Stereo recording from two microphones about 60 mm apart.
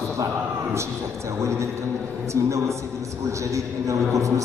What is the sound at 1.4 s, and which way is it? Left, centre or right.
Speech, right.